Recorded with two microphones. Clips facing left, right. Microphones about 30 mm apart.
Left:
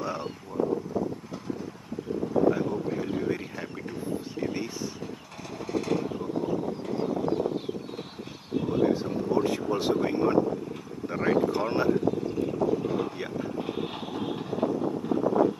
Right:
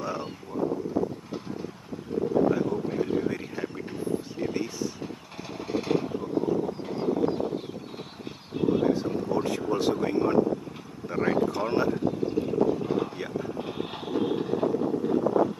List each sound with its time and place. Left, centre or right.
0.0 s vehicle: centre
0.5 s boat: right
2.4 s boat: centre
4.4 s a sound: centre
5.7 s vehicle: centre
6.0 s vehicle: centre
6.9 s a sound: centre
8.5 s vehicle: centre
11.1 s a sound: centre
12.4 s vehicle: centre